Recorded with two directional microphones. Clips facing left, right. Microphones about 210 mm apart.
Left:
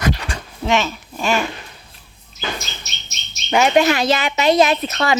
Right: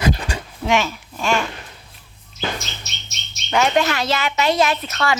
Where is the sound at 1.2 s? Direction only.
5° left (ahead or behind).